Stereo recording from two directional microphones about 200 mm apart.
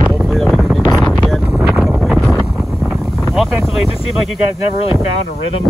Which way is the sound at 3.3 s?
Centre (ahead or behind).